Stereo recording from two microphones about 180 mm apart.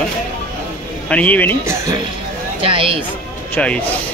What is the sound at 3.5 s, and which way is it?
Speech, 5° left (ahead or behind).